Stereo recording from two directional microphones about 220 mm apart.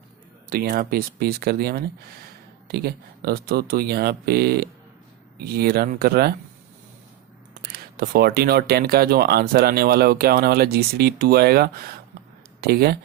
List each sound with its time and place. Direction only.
0.5 s speech: 40° right (ahead or behind)
7.7 s speech: 45° right (ahead or behind)